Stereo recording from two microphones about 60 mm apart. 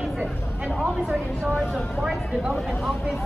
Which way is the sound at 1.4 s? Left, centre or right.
Centre.